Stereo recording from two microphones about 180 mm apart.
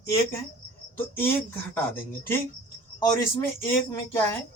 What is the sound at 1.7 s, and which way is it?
Speech, 10° left (ahead or behind).